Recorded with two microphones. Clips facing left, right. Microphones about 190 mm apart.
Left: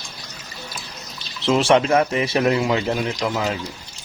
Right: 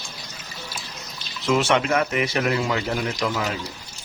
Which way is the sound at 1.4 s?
30° left (ahead or behind).